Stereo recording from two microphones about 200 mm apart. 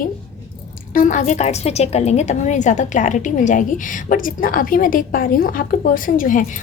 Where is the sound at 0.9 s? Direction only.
40° left (ahead or behind).